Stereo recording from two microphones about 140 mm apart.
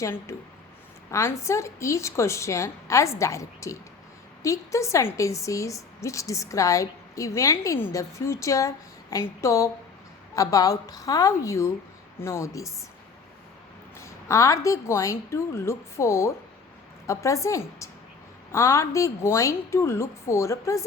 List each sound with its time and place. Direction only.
0.0 s a woman's voice: 20° left (ahead or behind)
14.0 s a woman's voice: 20° left (ahead or behind)